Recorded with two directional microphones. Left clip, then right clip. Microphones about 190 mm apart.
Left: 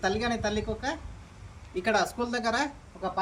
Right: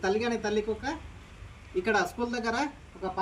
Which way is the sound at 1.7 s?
10° left (ahead or behind).